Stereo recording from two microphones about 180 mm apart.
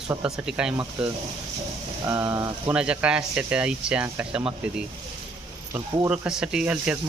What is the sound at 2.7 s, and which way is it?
Speech, 5° right (ahead or behind).